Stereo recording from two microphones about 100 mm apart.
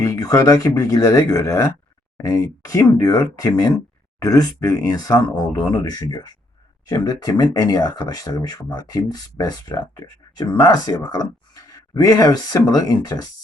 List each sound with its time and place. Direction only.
0.0 s speech: 35° left (ahead or behind)